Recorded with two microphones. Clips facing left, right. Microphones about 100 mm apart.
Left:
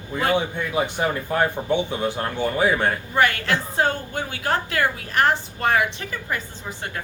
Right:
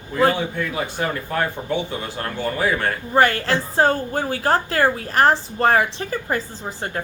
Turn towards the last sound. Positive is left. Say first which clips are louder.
# right 4 dB
turn(degrees=-35)  # may be behind; listen again after turning